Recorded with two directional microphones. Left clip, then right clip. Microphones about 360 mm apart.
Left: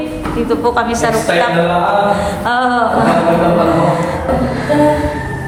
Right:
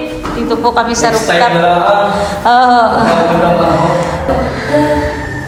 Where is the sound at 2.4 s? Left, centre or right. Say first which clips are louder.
Right 9 dB; centre.